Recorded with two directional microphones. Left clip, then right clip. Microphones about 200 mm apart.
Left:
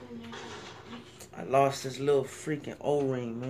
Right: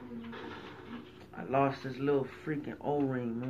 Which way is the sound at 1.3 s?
30° left (ahead or behind).